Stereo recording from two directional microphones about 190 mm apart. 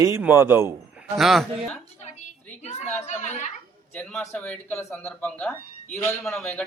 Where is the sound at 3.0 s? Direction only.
35° left (ahead or behind).